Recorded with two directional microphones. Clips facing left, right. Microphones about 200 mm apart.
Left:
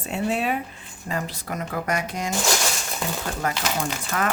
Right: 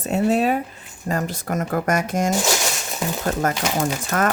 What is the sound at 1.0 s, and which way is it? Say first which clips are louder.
Speech: right 5 dB; 45° right (ahead or behind).